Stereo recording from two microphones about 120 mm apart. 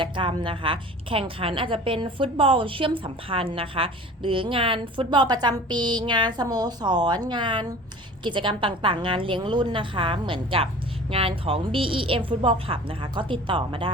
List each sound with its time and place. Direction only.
0.0 s a woman's voice: 45° right (ahead or behind)